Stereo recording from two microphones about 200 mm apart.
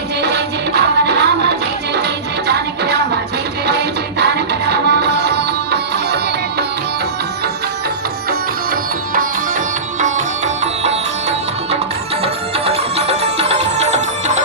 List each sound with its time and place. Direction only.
0.2 s music: 55° right (ahead or behind)
8.3 s music: 45° right (ahead or behind)